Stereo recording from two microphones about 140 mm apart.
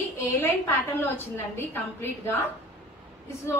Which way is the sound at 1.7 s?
15° left (ahead or behind).